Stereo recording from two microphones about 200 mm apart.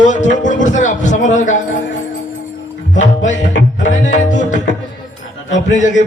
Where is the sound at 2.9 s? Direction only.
40° left (ahead or behind).